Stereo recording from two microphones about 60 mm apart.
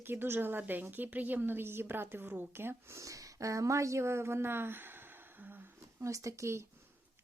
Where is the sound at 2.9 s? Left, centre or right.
Right.